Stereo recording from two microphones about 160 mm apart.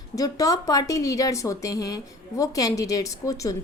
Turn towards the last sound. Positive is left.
turn(degrees=20)  # may be behind; listen again after turning